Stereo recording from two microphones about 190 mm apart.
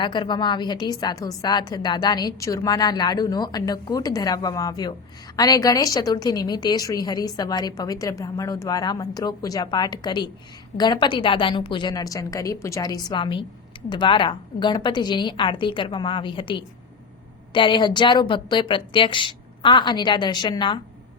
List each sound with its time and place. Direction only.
0.0 s a woman's voice: 25° left (ahead or behind)